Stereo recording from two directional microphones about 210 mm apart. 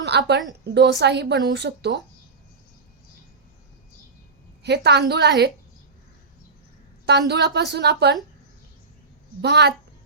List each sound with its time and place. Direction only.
0.0 s a woman's voice: 55° right (ahead or behind)
4.6 s a woman's voice: 55° right (ahead or behind)
7.3 s a woman's voice: 55° right (ahead or behind)
9.4 s a woman's voice: 55° right (ahead or behind)